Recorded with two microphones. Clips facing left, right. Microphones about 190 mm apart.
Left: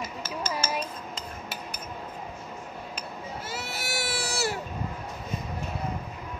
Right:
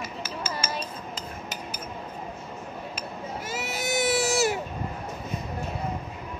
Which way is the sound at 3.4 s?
15° right (ahead or behind).